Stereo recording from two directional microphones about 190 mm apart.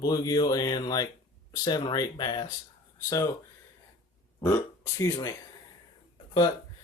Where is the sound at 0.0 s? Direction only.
20° left (ahead or behind).